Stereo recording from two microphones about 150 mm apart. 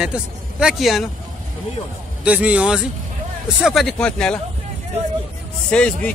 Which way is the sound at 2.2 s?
10° right (ahead or behind).